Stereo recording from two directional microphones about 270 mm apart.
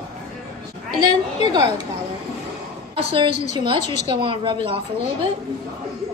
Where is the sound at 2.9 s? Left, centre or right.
Centre.